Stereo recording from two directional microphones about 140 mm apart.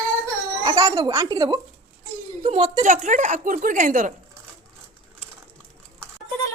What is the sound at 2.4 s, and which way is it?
Speech, 45° right (ahead or behind).